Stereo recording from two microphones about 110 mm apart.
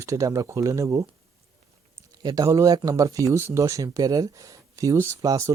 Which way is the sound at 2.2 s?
35° right (ahead or behind).